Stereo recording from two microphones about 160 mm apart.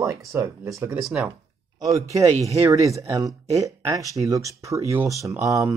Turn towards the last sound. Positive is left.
turn(degrees=-20)  # may be behind; listen again after turning